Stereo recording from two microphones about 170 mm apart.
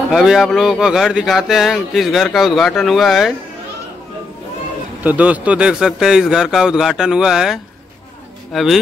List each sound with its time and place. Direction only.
0.1 s speech: centre (ahead or behind)
5.0 s speech: 10° right (ahead or behind)